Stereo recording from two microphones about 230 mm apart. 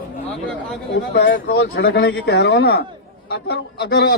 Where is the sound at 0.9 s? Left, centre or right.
Left.